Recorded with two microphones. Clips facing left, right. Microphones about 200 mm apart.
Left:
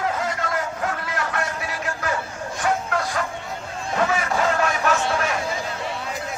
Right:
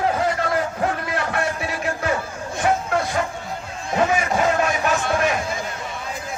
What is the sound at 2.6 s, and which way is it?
Music, 25° right (ahead or behind).